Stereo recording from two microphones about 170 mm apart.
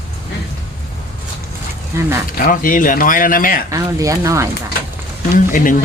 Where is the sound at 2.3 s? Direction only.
55° left (ahead or behind).